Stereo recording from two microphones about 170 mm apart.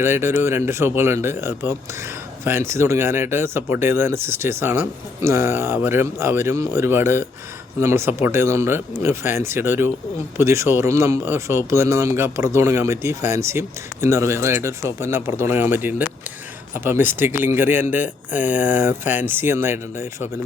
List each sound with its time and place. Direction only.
0.0 s speech: 15° right (ahead or behind)